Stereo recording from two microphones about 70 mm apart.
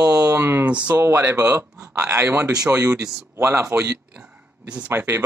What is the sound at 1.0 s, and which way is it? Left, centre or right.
Speech, right.